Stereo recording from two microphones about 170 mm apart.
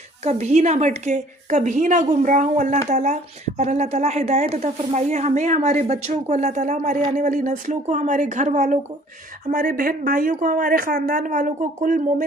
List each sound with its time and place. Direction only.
0.3 s speech: 40° right (ahead or behind)